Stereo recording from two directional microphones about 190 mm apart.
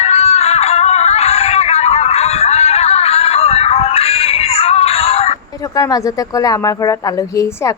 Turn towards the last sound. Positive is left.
turn(degrees=20)  # may be behind; listen again after turning